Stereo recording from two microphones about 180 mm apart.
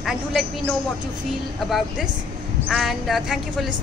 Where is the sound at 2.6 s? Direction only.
Centre (ahead or behind).